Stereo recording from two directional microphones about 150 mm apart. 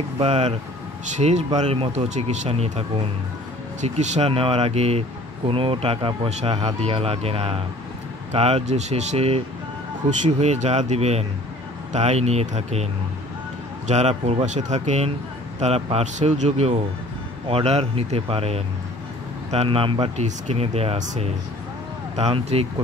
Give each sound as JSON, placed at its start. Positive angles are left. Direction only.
{"t": 0.2, "sound": "speech", "side_deg": -45}
{"t": 3.8, "sound": "speech", "side_deg": -50}